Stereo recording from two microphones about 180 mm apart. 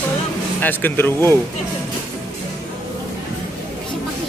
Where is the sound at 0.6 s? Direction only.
10° left (ahead or behind).